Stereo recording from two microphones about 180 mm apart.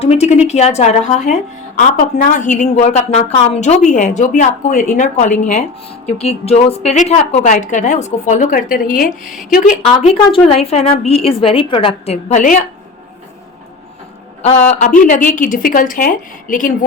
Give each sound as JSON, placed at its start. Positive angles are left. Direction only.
{"t": 0.0, "sound": "speech", "side_deg": 35}
{"t": 9.8, "sound": "speech", "side_deg": 35}
{"t": 14.4, "sound": "speech", "side_deg": 40}